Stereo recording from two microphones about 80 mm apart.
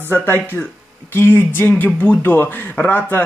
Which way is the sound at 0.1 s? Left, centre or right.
Left.